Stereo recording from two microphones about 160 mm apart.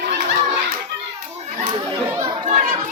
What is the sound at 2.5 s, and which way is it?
Children playing, 50° right (ahead or behind).